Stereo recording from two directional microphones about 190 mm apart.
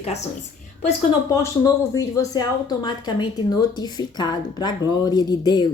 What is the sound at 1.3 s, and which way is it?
Speech, 15° left (ahead or behind).